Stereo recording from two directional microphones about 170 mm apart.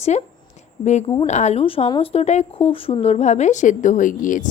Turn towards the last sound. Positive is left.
turn(degrees=50)  # may be behind; listen again after turning